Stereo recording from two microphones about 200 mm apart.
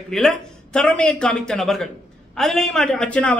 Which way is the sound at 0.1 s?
Centre (ahead or behind).